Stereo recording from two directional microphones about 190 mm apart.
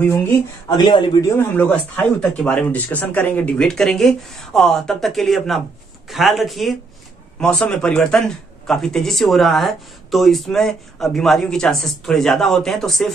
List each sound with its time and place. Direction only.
0.0 s speech: 10° left (ahead or behind)
1.3 s a man's voice: 10° left (ahead or behind)